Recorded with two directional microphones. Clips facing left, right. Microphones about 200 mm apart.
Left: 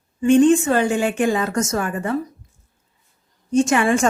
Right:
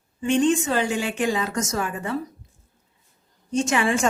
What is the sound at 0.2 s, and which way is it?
A woman's voice, 50° left (ahead or behind).